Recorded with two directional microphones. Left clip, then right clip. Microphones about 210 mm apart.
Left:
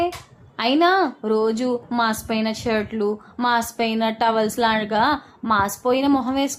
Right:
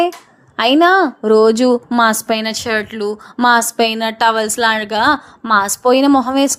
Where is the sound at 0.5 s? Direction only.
35° right (ahead or behind).